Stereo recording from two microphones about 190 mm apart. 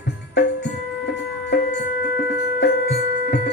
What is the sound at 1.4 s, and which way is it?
Music, 60° left (ahead or behind).